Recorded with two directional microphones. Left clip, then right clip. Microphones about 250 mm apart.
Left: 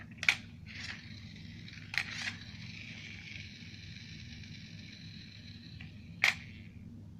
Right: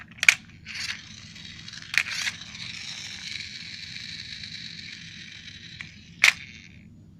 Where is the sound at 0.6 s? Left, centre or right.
Centre.